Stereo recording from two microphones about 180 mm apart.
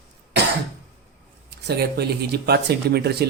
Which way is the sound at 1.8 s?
65° right (ahead or behind).